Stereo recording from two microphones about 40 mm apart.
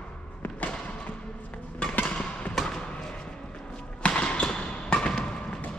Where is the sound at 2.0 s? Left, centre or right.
Left.